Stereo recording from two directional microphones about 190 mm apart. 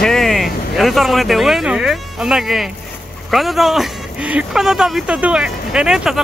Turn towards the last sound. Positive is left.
turn(degrees=-5)  # may be behind; listen again after turning